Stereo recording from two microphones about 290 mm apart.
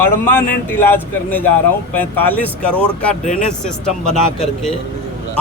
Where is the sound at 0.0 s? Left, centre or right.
Centre.